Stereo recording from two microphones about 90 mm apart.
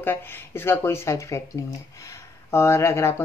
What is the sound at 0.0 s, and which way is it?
Speech, 25° left (ahead or behind).